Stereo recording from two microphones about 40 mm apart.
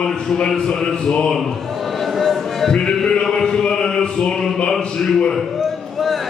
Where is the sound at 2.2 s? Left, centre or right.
Centre.